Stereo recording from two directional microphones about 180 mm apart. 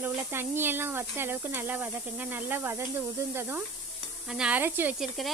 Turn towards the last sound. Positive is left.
turn(degrees=-10)  # may be behind; listen again after turning